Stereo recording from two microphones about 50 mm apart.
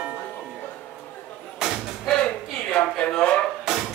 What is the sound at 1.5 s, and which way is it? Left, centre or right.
Slam, centre.